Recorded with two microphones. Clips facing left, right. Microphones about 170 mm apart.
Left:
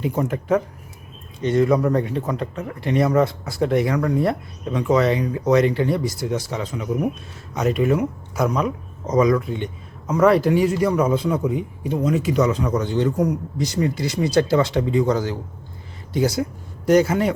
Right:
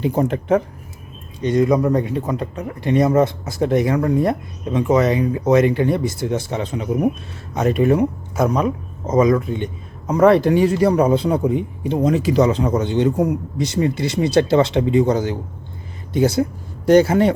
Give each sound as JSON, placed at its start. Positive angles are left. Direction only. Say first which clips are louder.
{"t": 0.0, "sound": "speech", "louder": "right 4 dB", "side_deg": -30}
{"t": 1.4, "sound": "a man's voice", "louder": "right 2 dB", "side_deg": -15}